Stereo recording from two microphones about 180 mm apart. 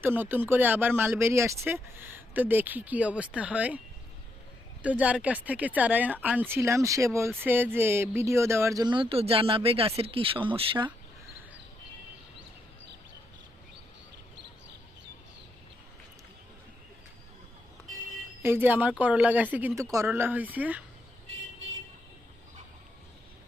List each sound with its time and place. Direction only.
0.0 s speech: 10° right (ahead or behind)
4.8 s speech: 10° right (ahead or behind); by 10.9 s 30° right (ahead or behind)
18.4 s speech: 10° right (ahead or behind)